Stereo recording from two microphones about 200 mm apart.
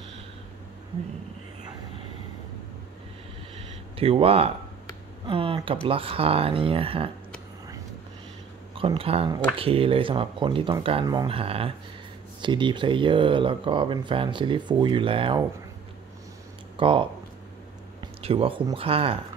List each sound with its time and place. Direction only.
3.9 s speech: 30° right (ahead or behind)
8.7 s speech: 25° right (ahead or behind)
16.7 s speech: 25° right (ahead or behind)